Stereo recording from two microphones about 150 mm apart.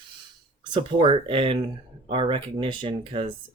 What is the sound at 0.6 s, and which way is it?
Speech, 35° right (ahead or behind).